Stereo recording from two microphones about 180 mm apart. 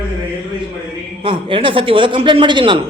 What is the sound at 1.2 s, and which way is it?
A man's voice, 30° right (ahead or behind).